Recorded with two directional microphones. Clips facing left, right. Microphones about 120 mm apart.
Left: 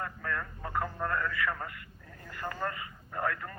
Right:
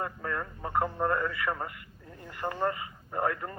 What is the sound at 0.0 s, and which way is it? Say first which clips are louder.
Speech: right 3 dB; 25° right (ahead or behind).